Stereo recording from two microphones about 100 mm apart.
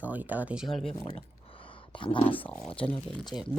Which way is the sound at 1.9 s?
60° left (ahead or behind).